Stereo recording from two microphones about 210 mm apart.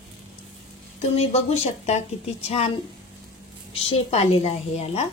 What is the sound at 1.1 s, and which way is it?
A woman's voice, 30° left (ahead or behind).